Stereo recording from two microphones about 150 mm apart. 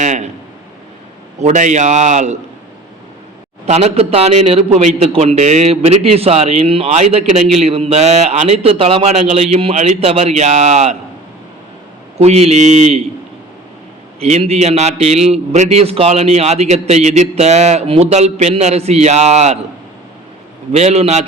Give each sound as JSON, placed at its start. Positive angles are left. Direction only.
{"t": 0.0, "sound": "speech", "side_deg": -50}
{"t": 1.4, "sound": "a man's voice", "side_deg": -50}
{"t": 3.7, "sound": "a man's voice", "side_deg": -45}
{"t": 12.1, "sound": "a man's voice", "side_deg": -45}
{"t": 14.2, "sound": "a man's voice", "side_deg": -45}
{"t": 20.7, "sound": "a man's voice", "side_deg": -45}